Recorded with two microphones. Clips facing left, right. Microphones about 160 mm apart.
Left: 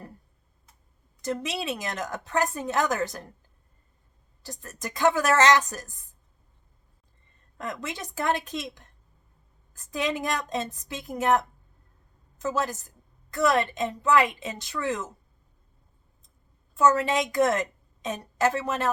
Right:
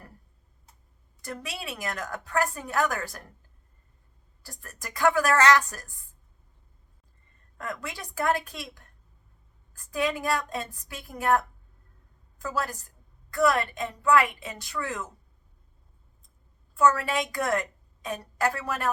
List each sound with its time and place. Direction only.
1.2 s a woman's voice: 20° left (ahead or behind)
4.4 s a woman's voice: 20° left (ahead or behind)
7.6 s a woman's voice: 20° left (ahead or behind)
16.7 s a woman's voice: 20° left (ahead or behind)